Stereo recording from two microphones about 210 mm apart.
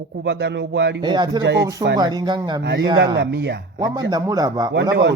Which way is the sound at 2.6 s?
55° right (ahead or behind).